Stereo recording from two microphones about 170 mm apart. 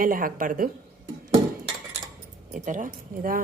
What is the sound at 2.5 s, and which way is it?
Speech, 50° right (ahead or behind).